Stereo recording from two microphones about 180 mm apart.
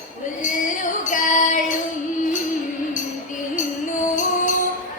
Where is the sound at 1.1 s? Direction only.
45° left (ahead or behind).